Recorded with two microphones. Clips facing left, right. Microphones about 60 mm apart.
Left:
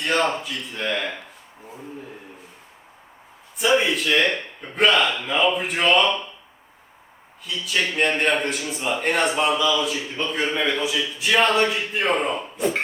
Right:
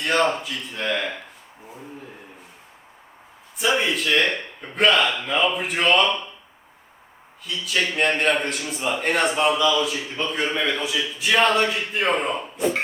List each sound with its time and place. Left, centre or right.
0.0 s a man's voice: centre
3.6 s a man's voice: centre
7.4 s a man's voice: centre